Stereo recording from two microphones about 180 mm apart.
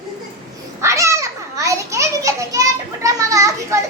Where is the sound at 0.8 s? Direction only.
15° right (ahead or behind).